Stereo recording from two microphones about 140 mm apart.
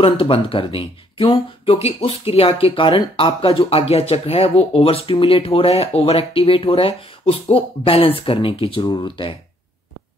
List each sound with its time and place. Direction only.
0.0 s speech: 40° left (ahead or behind)